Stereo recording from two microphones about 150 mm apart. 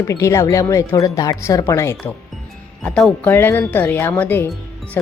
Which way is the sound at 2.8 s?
5° left (ahead or behind).